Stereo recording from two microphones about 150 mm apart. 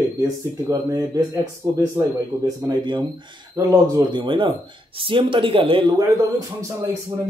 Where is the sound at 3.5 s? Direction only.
20° right (ahead or behind).